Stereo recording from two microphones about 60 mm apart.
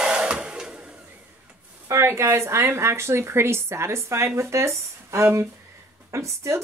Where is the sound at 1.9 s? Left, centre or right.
Right.